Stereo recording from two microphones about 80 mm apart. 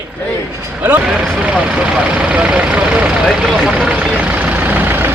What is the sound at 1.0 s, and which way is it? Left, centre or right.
Speech, centre.